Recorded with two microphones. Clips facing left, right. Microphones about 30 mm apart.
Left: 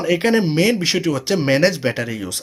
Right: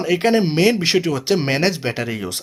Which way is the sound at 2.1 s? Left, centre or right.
Centre.